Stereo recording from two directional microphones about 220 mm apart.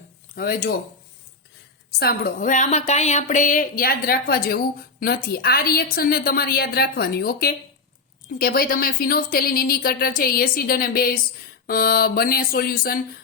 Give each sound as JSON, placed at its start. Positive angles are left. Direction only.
{"t": 0.3, "sound": "speech", "side_deg": 40}
{"t": 2.0, "sound": "a woman's voice", "side_deg": 45}